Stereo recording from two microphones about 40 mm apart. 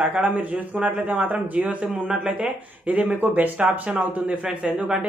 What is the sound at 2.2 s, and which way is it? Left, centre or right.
Speech, right.